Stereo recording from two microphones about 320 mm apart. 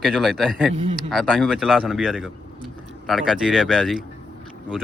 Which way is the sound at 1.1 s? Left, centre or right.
Centre.